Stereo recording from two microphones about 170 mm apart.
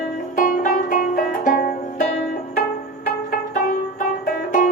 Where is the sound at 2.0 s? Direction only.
40° left (ahead or behind).